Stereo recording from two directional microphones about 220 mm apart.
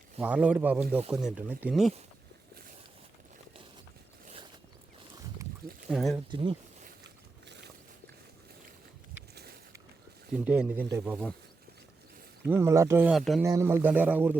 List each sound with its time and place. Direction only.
0.2 s speech: 5° right (ahead or behind)
5.9 s speech: centre (ahead or behind)
6.3 s speech: 20° right (ahead or behind)
7.4 s a sound: 50° right (ahead or behind)
9.3 s a sound: 45° right (ahead or behind)
10.3 s speech: 5° right (ahead or behind)
12.5 s speech: 10° right (ahead or behind)
13.4 s speech: 15° right (ahead or behind)